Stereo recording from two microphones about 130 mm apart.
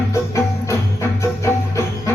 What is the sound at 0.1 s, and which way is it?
Music, 20° left (ahead or behind).